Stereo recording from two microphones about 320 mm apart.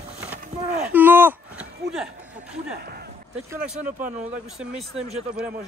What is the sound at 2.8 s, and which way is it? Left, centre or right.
Speech, right.